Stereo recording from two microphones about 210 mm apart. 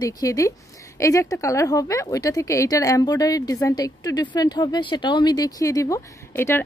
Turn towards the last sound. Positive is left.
turn(degrees=10)  # may be behind; listen again after turning